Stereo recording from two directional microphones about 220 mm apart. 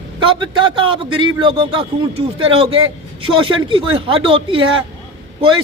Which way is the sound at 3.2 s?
20° right (ahead or behind).